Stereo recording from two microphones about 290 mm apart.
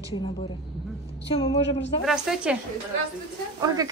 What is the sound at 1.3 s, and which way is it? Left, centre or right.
Speech, centre.